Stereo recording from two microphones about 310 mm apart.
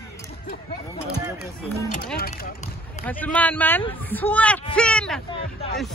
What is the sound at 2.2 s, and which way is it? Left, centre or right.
Speech, left.